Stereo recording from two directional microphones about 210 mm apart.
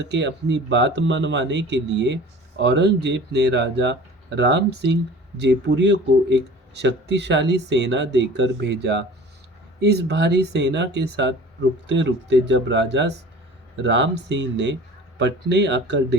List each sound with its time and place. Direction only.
0.0 s speech: 55° right (ahead or behind)